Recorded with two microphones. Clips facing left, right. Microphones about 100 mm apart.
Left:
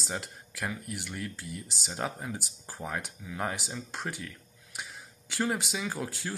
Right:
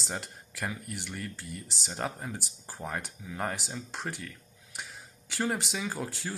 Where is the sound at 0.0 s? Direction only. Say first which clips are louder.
Left 1 dB; centre (ahead or behind).